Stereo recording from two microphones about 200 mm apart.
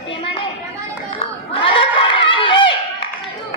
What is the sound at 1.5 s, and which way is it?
Crowd, 25° left (ahead or behind).